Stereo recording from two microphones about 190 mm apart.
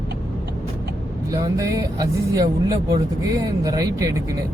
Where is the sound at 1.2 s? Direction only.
20° right (ahead or behind).